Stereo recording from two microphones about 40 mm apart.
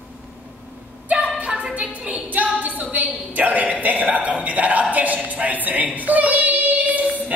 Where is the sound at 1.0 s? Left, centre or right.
Right.